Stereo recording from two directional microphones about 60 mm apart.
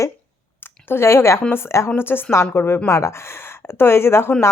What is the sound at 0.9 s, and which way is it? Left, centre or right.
Speech, left.